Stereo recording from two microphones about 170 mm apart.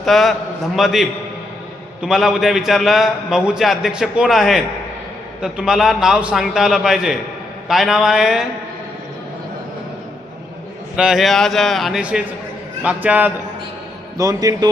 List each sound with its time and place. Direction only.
0.0 s a man's voice: centre (ahead or behind)
10.9 s a man's voice: 5° right (ahead or behind)
14.2 s a man's voice: 20° right (ahead or behind)